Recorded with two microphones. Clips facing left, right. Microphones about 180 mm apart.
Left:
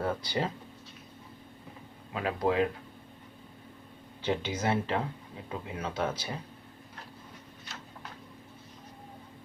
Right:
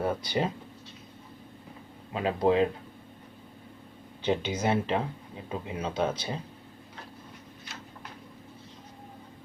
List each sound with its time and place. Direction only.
0.0 s speech: 20° right (ahead or behind)
2.1 s speech: 25° right (ahead or behind)
4.2 s speech: 20° right (ahead or behind)